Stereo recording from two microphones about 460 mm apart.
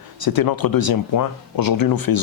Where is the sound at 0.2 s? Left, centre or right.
Left.